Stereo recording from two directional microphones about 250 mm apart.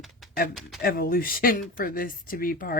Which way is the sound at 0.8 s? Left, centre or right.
Left.